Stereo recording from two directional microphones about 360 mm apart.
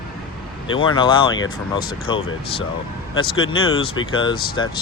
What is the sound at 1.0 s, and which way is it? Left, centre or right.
Speech, centre.